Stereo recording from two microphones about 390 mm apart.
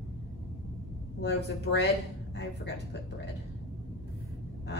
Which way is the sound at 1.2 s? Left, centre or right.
Left.